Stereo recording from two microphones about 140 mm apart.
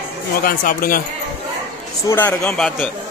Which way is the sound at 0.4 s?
90° left.